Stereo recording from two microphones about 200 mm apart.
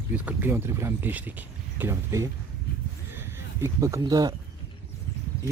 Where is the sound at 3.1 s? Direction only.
10° right (ahead or behind).